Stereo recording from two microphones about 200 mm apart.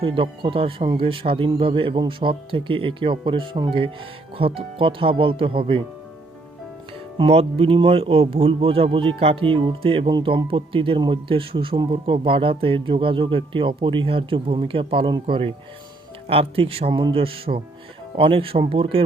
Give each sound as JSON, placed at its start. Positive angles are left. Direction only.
{"t": 0.0, "sound": "speech", "side_deg": -25}
{"t": 7.2, "sound": "speech", "side_deg": -30}